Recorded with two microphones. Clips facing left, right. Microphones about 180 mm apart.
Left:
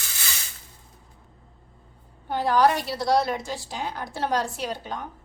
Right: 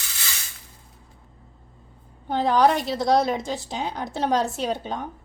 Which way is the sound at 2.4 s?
20° right (ahead or behind).